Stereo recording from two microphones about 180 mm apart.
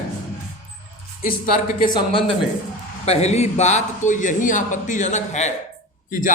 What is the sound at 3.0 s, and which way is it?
A man's voice, 35° left (ahead or behind).